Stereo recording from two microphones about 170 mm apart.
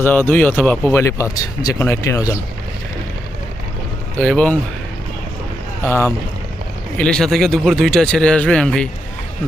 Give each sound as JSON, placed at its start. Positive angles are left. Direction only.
{"t": 0.0, "sound": "speech", "side_deg": 10}
{"t": 4.2, "sound": "speech", "side_deg": 5}
{"t": 5.8, "sound": "speech", "side_deg": 15}